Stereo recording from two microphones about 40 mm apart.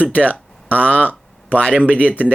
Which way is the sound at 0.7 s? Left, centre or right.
Right.